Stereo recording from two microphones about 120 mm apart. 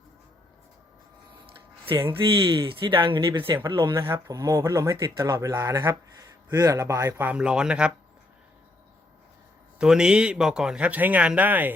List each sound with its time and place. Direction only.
1.5 s a sound: 50° right (ahead or behind)
2.4 s speech: 45° right (ahead or behind)
3.9 s speech: 20° right (ahead or behind)
9.7 s a man's voice: 5° right (ahead or behind)